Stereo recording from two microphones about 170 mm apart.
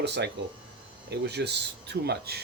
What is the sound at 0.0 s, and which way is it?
Speech, 80° right.